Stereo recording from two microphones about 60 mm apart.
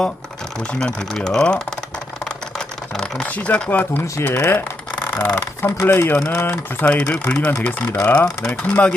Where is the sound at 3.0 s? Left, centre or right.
Centre.